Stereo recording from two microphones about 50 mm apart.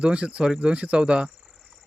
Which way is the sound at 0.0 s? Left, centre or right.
Right.